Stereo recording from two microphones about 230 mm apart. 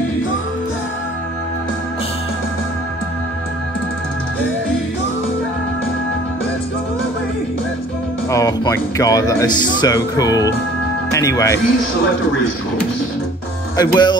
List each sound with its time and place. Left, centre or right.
8.3 s speech: centre
13.7 s speech: centre